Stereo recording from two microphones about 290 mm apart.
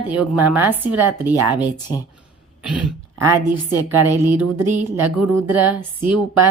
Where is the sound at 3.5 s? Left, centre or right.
Right.